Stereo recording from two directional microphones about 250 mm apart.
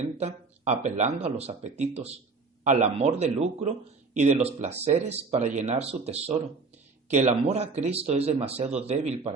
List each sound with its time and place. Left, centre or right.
0.2 s a man's voice: right